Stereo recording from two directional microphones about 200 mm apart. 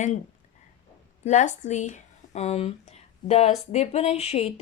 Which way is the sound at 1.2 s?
35° left (ahead or behind).